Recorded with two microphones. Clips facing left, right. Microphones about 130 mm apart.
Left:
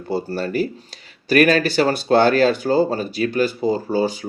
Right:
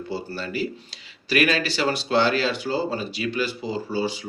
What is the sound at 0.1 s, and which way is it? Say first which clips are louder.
Speech: left 9 dB; 50° left (ahead or behind).